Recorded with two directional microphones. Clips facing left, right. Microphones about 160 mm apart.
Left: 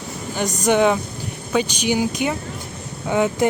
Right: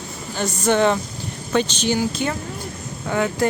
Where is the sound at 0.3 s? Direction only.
15° left (ahead or behind).